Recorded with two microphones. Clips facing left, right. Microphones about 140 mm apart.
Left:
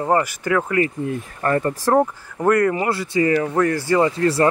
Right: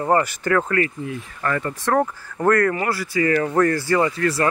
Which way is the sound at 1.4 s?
35° left (ahead or behind).